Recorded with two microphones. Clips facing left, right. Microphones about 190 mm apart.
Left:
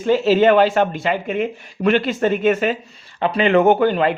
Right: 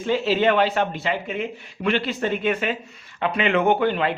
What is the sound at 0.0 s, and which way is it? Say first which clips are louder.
Speech: left 6 dB; 45° left (ahead or behind).